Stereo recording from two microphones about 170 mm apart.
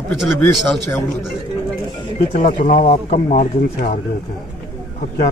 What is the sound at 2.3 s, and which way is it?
Speech, 50° left (ahead or behind).